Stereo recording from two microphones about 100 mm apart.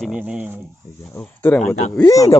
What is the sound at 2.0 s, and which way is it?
Speech, 35° left (ahead or behind).